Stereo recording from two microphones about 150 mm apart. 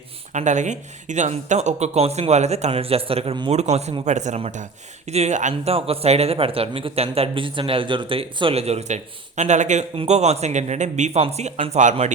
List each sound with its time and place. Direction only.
0.3 s speech: 50° right (ahead or behind); by 3.5 s 35° right (ahead or behind)
3.5 s speech: 50° right (ahead or behind)